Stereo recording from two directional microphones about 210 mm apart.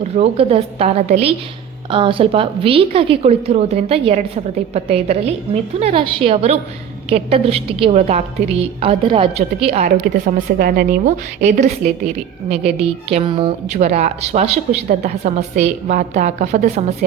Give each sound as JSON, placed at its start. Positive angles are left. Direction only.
{"t": 0.2, "sound": "a woman's voice", "side_deg": -30}
{"t": 9.8, "sound": "a woman's voice", "side_deg": -40}